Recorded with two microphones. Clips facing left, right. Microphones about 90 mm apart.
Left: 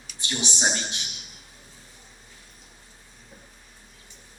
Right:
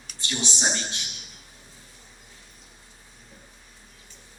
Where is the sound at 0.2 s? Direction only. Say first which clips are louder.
Left 1 dB; 15° left (ahead or behind).